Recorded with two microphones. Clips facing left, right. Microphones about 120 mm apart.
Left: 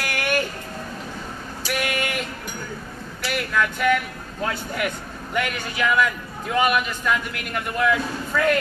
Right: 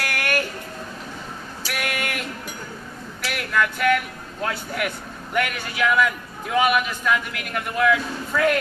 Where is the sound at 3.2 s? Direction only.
Centre (ahead or behind).